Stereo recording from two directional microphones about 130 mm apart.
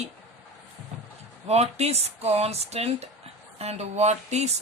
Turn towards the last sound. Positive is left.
turn(degrees=-55)  # may be behind; listen again after turning